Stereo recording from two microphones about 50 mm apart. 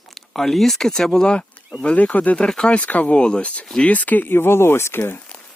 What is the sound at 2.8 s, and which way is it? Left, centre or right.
Speech, left.